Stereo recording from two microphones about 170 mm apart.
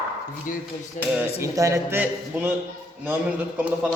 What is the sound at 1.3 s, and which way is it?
A man's voice, 20° right (ahead or behind).